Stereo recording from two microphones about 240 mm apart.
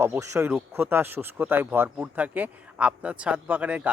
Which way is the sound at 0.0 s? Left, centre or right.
Centre.